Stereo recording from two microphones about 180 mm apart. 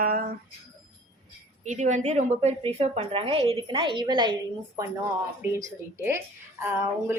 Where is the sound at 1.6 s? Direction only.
45° right (ahead or behind); by 4.4 s 25° right (ahead or behind).